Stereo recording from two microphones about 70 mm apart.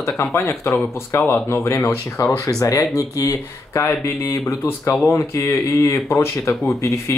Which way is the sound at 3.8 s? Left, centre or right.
Left.